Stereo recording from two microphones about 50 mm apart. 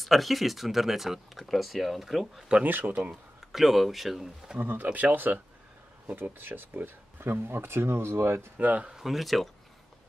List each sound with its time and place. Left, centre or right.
0.0 s speech: centre
2.6 s speech: right
3.1 s speech: centre
4.6 s speech: right
8.5 s speech: right
8.9 s speech: centre